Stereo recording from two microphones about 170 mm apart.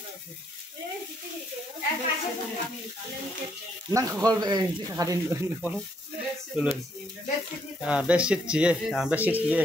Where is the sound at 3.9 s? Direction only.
20° right (ahead or behind).